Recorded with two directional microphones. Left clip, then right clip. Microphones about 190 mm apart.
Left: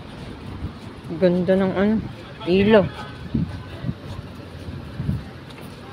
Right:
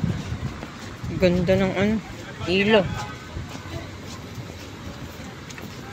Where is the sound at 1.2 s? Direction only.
20° left (ahead or behind).